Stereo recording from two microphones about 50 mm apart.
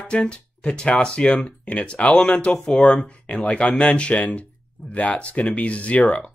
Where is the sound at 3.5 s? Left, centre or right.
Left.